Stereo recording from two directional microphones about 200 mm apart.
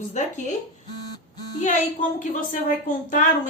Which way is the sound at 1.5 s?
35° left (ahead or behind).